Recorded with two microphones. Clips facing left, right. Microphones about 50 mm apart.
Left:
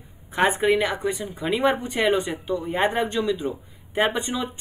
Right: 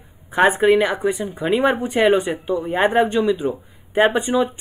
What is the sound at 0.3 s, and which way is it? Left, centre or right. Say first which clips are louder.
A woman's voice: right 5 dB; centre.